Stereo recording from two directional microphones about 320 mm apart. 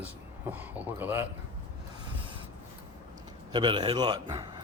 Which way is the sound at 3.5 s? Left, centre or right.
Centre.